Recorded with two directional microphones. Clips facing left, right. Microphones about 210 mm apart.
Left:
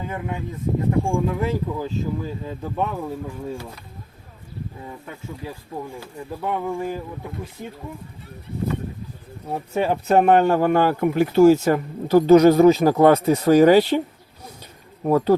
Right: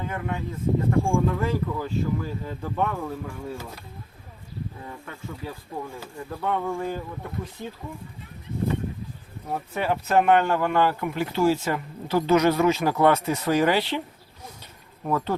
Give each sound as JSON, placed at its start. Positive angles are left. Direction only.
{"t": 0.9, "sound": "speech", "side_deg": 20}
{"t": 6.3, "sound": "speech", "side_deg": 10}
{"t": 9.5, "sound": "speech", "side_deg": 25}
{"t": 15.0, "sound": "speech", "side_deg": 35}